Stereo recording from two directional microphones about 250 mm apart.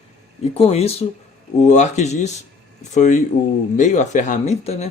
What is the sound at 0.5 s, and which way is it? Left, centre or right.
Speech, left.